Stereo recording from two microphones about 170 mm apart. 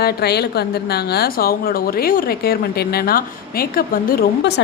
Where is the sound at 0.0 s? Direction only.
70° left (ahead or behind).